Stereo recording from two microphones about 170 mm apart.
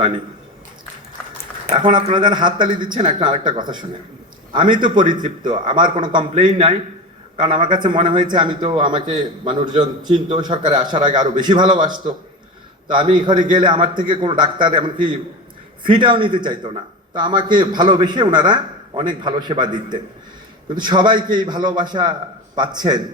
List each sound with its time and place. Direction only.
1.7 s a man's voice: 30° right (ahead or behind)
12.9 s a man's voice: 30° right (ahead or behind)